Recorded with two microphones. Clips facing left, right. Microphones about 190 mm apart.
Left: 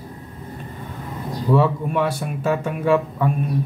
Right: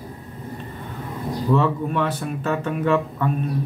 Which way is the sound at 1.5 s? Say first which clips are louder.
Left 3 dB; 10° left (ahead or behind).